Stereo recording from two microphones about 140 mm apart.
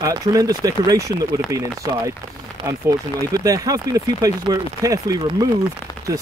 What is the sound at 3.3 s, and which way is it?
Speech, 25° right (ahead or behind).